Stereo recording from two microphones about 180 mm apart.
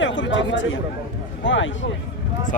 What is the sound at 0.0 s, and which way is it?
Speech, 90° left.